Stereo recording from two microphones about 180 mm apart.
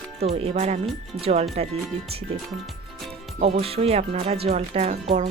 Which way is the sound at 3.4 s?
35° right (ahead or behind).